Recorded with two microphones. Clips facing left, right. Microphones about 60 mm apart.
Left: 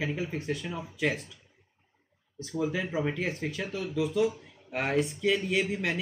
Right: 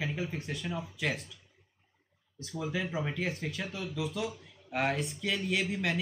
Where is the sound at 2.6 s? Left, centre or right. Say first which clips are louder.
Left 4 dB; centre.